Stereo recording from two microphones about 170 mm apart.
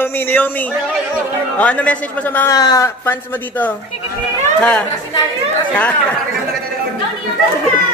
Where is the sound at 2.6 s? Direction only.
20° left (ahead or behind).